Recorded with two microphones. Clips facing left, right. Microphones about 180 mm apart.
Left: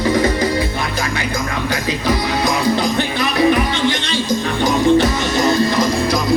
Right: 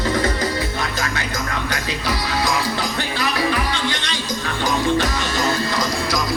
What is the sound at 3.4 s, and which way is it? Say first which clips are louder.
Music: left 11 dB; 20° left (ahead or behind).